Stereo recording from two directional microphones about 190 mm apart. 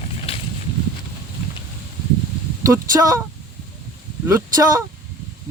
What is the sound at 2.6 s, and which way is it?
Speech, 15° right (ahead or behind).